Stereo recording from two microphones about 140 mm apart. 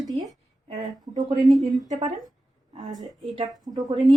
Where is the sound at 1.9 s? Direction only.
55° right (ahead or behind).